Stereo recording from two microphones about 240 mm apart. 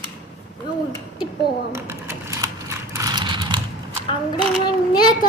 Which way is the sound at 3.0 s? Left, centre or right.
Centre.